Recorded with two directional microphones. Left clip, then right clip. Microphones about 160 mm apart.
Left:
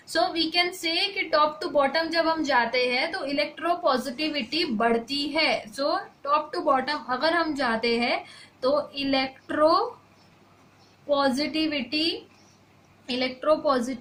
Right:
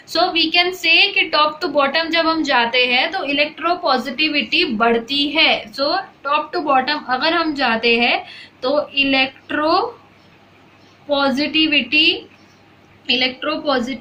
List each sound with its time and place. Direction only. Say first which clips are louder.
0.1 s a woman's voice: right 8 dB; 55° left (ahead or behind)
11.1 s a woman's voice: right 7 dB; 65° left (ahead or behind)
13.1 s a woman's voice: right 6 dB; 65° left (ahead or behind)